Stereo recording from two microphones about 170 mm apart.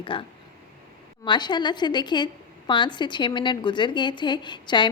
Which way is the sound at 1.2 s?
25° left (ahead or behind).